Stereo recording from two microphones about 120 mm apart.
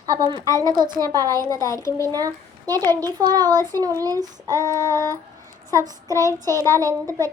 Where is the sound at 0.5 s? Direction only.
30° right (ahead or behind).